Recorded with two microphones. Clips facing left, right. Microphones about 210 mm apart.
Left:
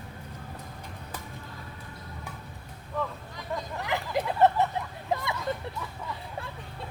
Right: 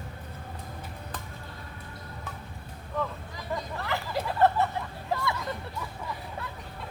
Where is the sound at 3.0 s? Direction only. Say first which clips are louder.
Right 1 dB; centre (ahead or behind).